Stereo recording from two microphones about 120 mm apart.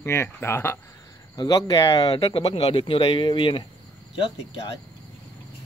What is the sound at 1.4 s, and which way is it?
Speech, 30° left (ahead or behind).